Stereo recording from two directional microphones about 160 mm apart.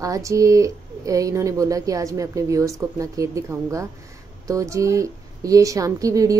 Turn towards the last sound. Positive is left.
turn(degrees=-20)  # may be behind; listen again after turning